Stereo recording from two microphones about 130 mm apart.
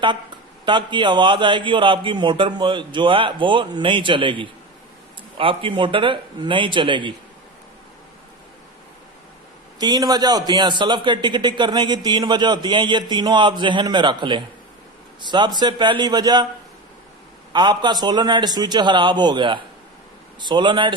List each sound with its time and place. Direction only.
0.6 s a man's voice: 40° right (ahead or behind)
9.7 s a man's voice: 30° right (ahead or behind)
17.5 s a man's voice: 35° right (ahead or behind)